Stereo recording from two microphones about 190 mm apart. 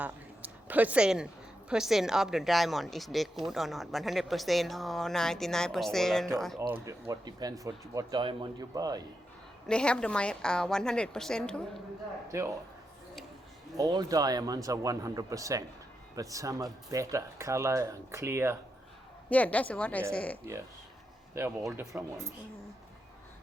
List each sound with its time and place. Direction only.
0.0 s a sound: 10° right (ahead or behind)
1.7 s speech: centre (ahead or behind)
6.6 s speech: 15° right (ahead or behind)
9.6 s speech: 5° left (ahead or behind)
12.3 s speech: 15° right (ahead or behind)
13.7 s speech: 20° right (ahead or behind)
19.3 s a woman's voice: 10° left (ahead or behind)
20.4 s speech: 15° right (ahead or behind)
21.6 s speech: centre (ahead or behind)